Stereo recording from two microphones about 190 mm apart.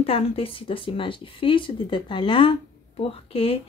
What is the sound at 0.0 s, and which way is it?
Speech, 30° left (ahead or behind).